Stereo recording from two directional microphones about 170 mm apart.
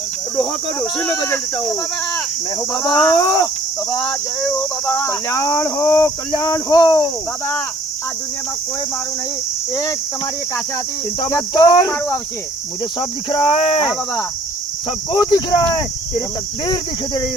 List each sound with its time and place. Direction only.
0.3 s speech: 10° left (ahead or behind)
2.7 s speech: 20° left (ahead or behind)
3.9 s speech: 5° left (ahead or behind); by 7.5 s 20° left (ahead or behind)
11.2 s speech: 20° left (ahead or behind)
13.0 s speech: 30° left (ahead or behind)
15.1 s speech: 25° left (ahead or behind)